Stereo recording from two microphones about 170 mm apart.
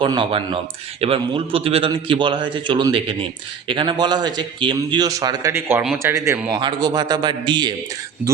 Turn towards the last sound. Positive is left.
turn(degrees=-25)  # may be behind; listen again after turning